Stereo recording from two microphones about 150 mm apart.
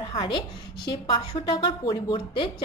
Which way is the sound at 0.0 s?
35° left (ahead or behind).